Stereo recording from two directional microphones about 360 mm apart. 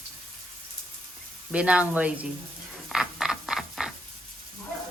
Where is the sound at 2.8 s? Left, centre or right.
Centre.